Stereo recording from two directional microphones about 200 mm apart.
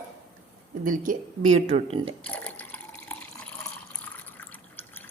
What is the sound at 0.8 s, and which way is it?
Speech, 45° right (ahead or behind).